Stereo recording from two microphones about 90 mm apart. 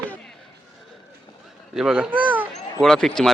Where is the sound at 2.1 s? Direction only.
20° right (ahead or behind).